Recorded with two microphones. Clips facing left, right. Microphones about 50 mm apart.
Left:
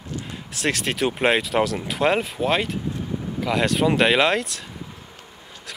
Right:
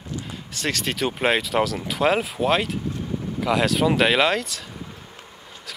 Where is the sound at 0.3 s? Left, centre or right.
Centre.